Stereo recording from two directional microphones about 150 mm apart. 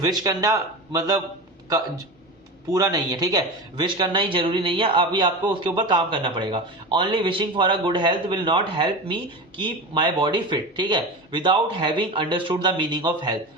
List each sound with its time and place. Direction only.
0.0 s a man's voice: 25° right (ahead or behind)
2.6 s speech: 25° right (ahead or behind)